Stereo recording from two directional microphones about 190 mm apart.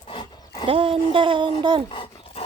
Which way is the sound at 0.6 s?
30° right (ahead or behind).